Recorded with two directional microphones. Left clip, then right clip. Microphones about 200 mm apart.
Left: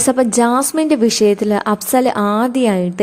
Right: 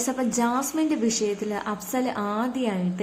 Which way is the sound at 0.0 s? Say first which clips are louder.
Left 12 dB; 45° left (ahead or behind).